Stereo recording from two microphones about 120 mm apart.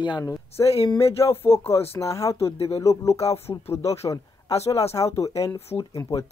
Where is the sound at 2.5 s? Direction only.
60° left (ahead or behind).